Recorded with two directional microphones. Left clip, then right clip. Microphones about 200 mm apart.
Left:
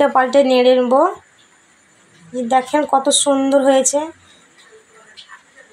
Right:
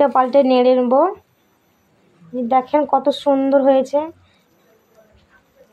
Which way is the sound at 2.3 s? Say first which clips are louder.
Even; 15° left (ahead or behind).